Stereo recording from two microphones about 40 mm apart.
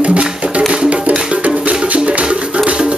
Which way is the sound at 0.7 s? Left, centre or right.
Right.